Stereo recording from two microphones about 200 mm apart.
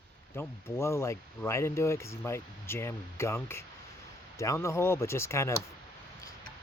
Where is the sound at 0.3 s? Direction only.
15° left (ahead or behind).